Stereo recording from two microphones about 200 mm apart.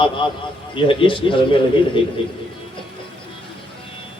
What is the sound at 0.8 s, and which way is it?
Speech, 25° left (ahead or behind).